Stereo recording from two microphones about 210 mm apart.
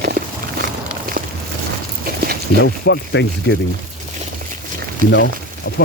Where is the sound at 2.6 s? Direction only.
55° left (ahead or behind).